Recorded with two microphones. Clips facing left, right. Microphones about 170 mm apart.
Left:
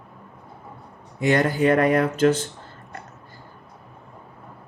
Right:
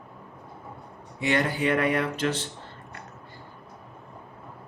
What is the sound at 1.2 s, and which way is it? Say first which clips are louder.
Speech: left 6 dB; 45° left (ahead or behind).